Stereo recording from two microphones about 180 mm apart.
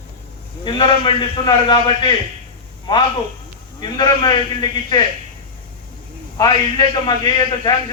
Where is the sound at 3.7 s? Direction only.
25° left (ahead or behind).